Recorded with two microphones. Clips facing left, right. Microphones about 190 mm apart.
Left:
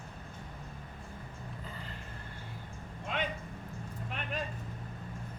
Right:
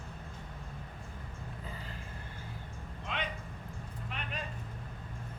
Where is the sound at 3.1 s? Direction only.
45° left (ahead or behind).